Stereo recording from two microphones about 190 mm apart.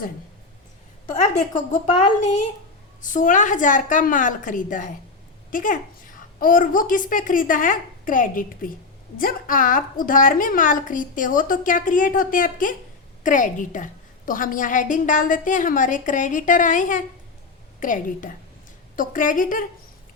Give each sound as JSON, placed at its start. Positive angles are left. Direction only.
{"t": 1.1, "sound": "a woman's voice", "side_deg": 40}